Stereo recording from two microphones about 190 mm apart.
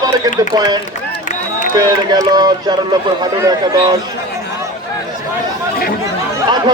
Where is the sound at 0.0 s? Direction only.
20° right (ahead or behind).